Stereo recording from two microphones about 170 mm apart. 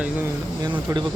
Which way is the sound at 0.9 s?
20° right (ahead or behind).